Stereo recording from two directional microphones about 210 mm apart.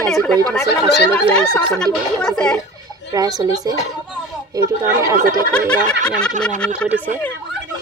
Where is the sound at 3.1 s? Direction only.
15° right (ahead or behind).